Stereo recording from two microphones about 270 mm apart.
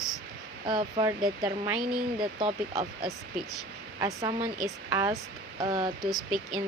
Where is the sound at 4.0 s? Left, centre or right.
Centre.